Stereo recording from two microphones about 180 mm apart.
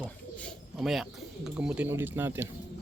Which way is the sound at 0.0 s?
5° left (ahead or behind).